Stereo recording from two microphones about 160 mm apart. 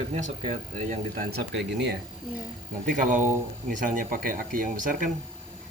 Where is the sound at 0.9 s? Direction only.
60° right (ahead or behind); by 1.9 s 85° right.